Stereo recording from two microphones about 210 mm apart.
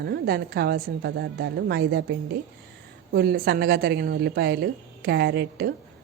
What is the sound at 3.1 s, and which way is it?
A woman's voice, 50° right (ahead or behind).